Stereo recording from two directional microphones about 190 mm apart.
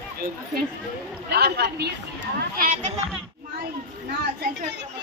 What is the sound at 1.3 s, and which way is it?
Speech, 60° right (ahead or behind).